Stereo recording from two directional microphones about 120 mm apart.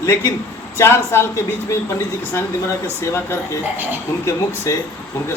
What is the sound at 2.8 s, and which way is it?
A man's voice, 25° left (ahead or behind).